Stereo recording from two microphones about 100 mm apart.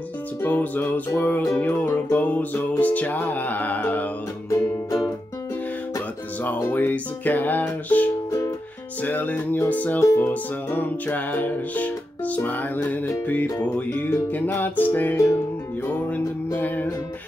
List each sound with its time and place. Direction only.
0.4 s music: 20° left (ahead or behind)
4.5 s music: 30° left (ahead or behind)
5.9 s music: 15° left (ahead or behind)
8.3 s music: 35° left (ahead or behind)
9.0 s music: 15° left (ahead or behind)
16.5 s music: 20° left (ahead or behind)